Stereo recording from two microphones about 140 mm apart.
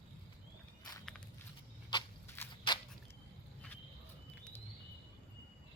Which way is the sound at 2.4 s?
15° left (ahead or behind).